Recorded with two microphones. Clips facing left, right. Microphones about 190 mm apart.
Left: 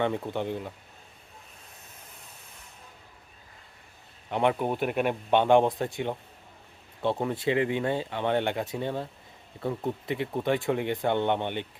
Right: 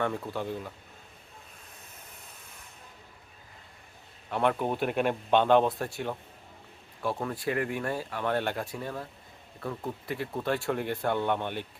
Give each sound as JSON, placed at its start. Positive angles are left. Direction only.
{"t": 0.0, "sound": "speech", "side_deg": 20}
{"t": 4.3, "sound": "speech", "side_deg": 15}